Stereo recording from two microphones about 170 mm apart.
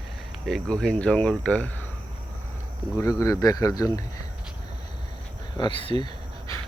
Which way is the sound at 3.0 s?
20° left (ahead or behind).